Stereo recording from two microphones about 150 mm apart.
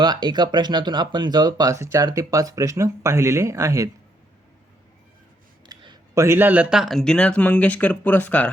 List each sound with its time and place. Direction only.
0.0 s speech: 30° right (ahead or behind)
5.6 s a sound: 30° right (ahead or behind)
6.2 s speech: 15° right (ahead or behind); by 8.4 s 10° left (ahead or behind)